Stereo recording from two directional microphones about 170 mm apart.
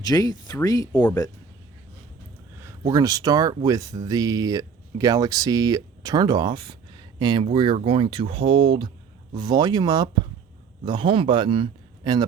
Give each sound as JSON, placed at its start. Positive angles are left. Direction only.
{"t": 0.0, "sound": "speech", "side_deg": 20}
{"t": 2.6, "sound": "a man's voice", "side_deg": -15}